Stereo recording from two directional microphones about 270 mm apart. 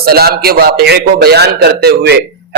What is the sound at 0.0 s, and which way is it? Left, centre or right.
A man's voice, right.